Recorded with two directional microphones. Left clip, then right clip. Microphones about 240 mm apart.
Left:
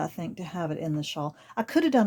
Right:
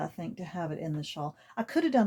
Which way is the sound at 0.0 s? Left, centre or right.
Left.